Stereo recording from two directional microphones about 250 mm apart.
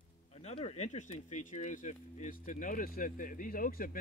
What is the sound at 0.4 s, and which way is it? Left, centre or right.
Speech, left.